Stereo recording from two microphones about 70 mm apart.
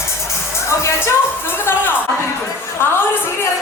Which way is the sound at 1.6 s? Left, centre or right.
Left.